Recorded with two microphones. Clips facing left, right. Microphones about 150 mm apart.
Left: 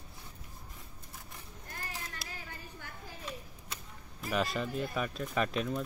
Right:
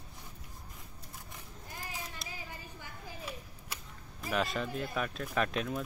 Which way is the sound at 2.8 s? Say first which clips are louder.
Right 1 dB; 10° right (ahead or behind).